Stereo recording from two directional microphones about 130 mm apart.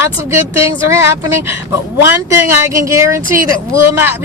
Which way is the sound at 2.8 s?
20° right (ahead or behind).